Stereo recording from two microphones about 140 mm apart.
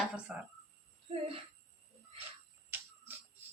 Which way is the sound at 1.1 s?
45° right (ahead or behind).